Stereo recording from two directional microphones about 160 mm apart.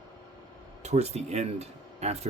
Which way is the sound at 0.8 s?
45° right (ahead or behind).